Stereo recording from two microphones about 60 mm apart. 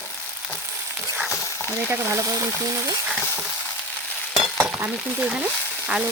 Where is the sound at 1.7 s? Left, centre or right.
Right.